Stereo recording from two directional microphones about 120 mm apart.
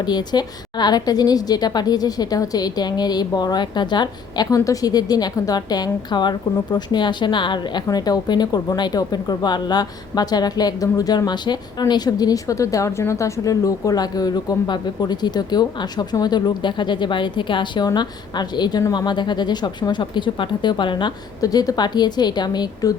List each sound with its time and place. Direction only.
0.0 s a woman's voice: 35° left (ahead or behind)